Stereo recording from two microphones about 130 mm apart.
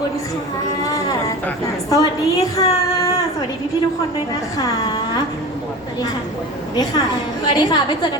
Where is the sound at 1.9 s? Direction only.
25° left (ahead or behind).